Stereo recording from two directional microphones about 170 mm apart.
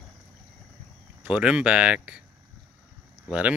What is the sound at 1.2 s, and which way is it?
Speech, 5° right (ahead or behind).